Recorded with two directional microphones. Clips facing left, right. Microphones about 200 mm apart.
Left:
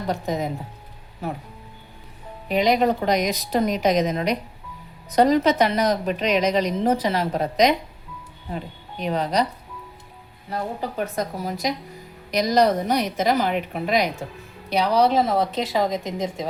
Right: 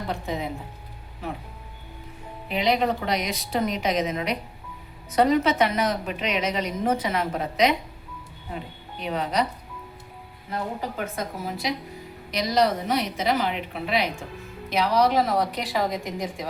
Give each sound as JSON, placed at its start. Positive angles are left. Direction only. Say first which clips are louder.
{"t": 0.1, "sound": "a woman's voice", "louder": "left 5 dB", "side_deg": 40}
{"t": 2.5, "sound": "a woman's voice", "louder": "left 4 dB", "side_deg": 45}
{"t": 9.0, "sound": "a woman's voice", "louder": "left 3 dB", "side_deg": 40}
{"t": 10.5, "sound": "a woman's voice", "louder": "left 2 dB", "side_deg": 35}
{"t": 14.7, "sound": "a woman's voice", "louder": "left 2 dB", "side_deg": 30}